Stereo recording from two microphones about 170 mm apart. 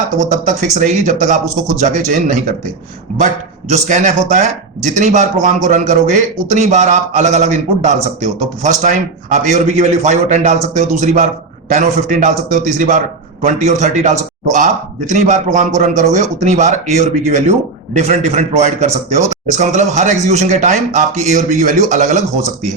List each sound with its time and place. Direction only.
0.2 s speech: 45° right (ahead or behind)
3.7 s a man's voice: 45° right (ahead or behind)